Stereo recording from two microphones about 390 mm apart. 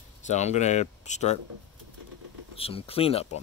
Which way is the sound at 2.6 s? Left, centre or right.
Centre.